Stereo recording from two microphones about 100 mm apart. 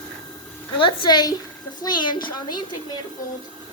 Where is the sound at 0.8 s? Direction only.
50° left (ahead or behind).